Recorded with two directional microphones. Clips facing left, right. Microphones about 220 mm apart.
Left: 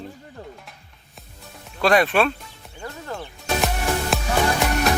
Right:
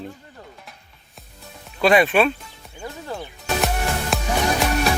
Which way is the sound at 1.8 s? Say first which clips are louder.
Right 2 dB; centre (ahead or behind).